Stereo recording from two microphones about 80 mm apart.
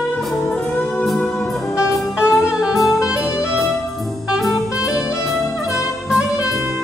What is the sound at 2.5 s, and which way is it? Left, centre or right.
Music, centre.